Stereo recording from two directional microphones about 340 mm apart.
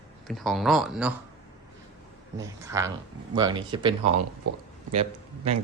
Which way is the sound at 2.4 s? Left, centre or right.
Centre.